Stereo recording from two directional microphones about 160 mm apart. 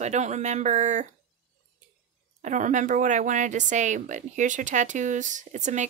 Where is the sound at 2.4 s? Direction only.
50° right (ahead or behind).